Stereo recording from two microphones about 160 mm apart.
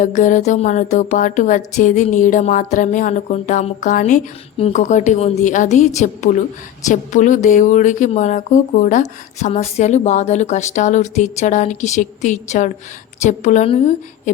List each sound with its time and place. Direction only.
0.0 s speech: 55° left (ahead or behind)